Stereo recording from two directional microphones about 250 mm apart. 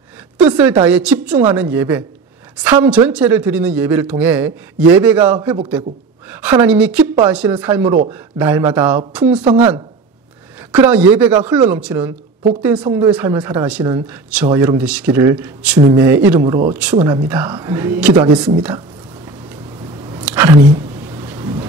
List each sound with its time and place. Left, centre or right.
0.4 s a sound: centre
0.8 s a woman's voice: centre
6.4 s a woman's voice: centre
9.4 s speech: right
10.9 s a woman's voice: centre
20.2 s a sound: centre